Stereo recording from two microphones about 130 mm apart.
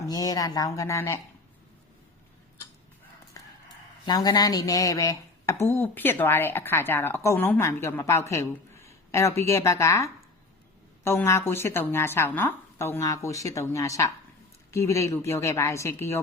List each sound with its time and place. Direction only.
0.1 s speech: 30° left (ahead or behind)
4.0 s speech: 30° left (ahead or behind)